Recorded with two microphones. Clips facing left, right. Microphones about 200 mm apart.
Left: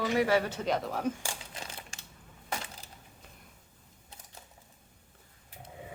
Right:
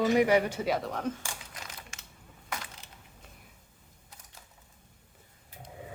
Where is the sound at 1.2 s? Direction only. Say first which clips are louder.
Left 2 dB; 30° left (ahead or behind).